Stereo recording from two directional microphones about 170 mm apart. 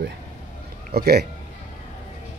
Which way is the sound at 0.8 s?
65° right (ahead or behind).